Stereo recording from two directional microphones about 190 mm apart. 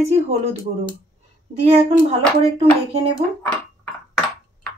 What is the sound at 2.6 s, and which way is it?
Speech, 30° right (ahead or behind).